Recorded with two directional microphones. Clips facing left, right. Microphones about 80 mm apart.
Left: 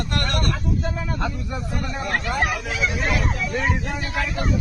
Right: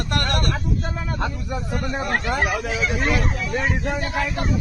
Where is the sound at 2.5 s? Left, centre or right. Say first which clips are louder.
Right 2 dB; right.